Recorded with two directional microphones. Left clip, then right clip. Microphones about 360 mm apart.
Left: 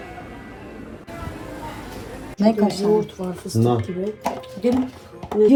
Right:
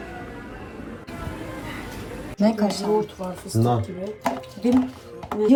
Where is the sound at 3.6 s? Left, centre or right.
Right.